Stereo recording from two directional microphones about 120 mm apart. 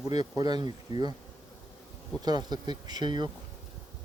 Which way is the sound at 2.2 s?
35° right (ahead or behind).